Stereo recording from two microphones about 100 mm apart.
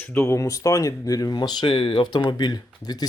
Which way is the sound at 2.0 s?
45° left (ahead or behind).